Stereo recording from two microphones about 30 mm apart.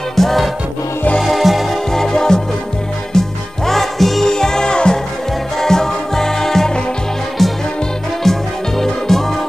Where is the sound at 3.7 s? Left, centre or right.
Centre.